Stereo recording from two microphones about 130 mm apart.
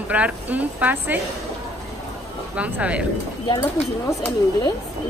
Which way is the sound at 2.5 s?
10° right (ahead or behind).